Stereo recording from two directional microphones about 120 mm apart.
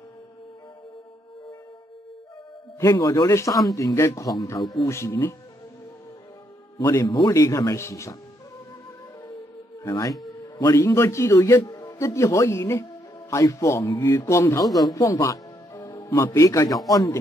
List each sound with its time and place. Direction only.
2.8 s a man's voice: 30° left (ahead or behind)
4.6 s a man's voice: centre (ahead or behind)
4.8 s a man's voice: 25° left (ahead or behind)
6.8 s a man's voice: 25° left (ahead or behind)
9.8 s a man's voice: 30° left (ahead or behind)